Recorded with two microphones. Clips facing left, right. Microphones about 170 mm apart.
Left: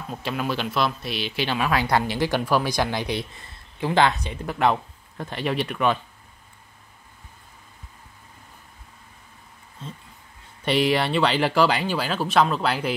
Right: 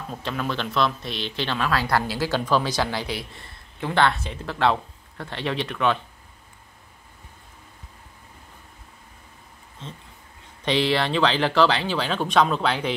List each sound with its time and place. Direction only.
0.1 s speech: 10° left (ahead or behind)
10.6 s speech: 10° left (ahead or behind)